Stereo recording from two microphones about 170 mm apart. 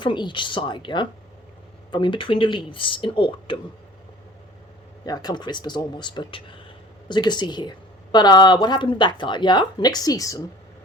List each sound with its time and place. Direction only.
0.0 s speech: 25° left (ahead or behind)
5.0 s speech: 25° left (ahead or behind)